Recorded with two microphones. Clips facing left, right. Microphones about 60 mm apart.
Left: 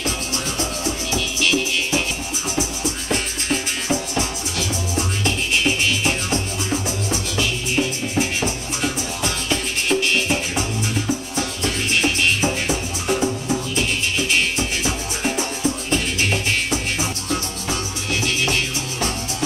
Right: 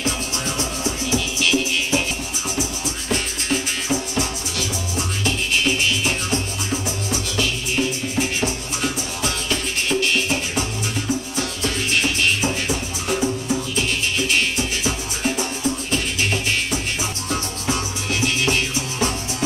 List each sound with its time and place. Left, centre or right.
1.5 s music: centre
2.5 s music: centre
8.4 s music: centre
9.5 s music: centre
18.5 s music: centre